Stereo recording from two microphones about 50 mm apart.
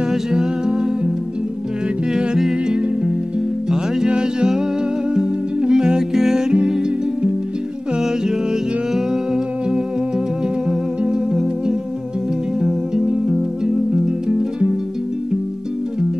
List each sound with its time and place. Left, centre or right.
0.1 s music: centre
2.1 s music: centre
8.9 s music: centre